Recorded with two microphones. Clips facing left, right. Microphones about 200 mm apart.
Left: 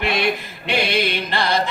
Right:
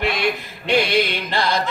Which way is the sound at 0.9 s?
60° left (ahead or behind).